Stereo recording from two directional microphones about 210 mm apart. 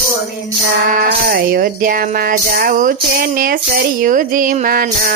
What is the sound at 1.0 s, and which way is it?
Speech, 45° right (ahead or behind).